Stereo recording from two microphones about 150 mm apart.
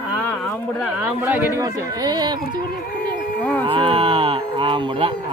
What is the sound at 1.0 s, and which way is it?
Speech, 10° right (ahead or behind).